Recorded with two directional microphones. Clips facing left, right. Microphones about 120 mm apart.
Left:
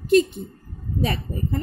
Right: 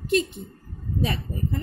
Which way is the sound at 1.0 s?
50° left (ahead or behind).